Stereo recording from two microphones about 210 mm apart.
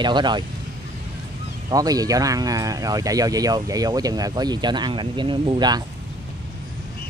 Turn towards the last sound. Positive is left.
turn(degrees=-20)  # may be behind; listen again after turning